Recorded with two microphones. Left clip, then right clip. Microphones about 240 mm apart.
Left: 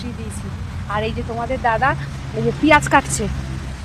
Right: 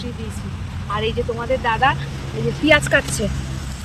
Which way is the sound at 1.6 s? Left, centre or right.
Centre.